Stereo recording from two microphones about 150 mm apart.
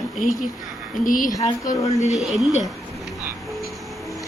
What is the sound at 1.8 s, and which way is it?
Speech, 45° left (ahead or behind).